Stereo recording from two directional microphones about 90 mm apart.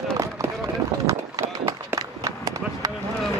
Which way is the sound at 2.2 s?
35° right (ahead or behind).